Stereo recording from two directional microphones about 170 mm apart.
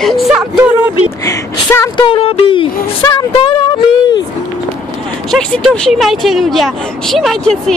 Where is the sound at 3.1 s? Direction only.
30° left (ahead or behind).